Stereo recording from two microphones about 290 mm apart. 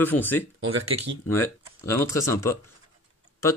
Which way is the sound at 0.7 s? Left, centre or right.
Right.